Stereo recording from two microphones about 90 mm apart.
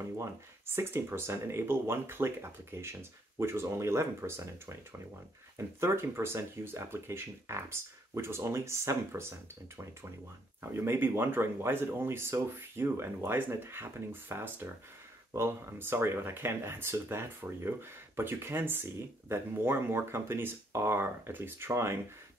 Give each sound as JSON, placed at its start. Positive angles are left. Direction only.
{"t": 0.2, "sound": "speech", "side_deg": -25}
{"t": 10.6, "sound": "speech", "side_deg": -25}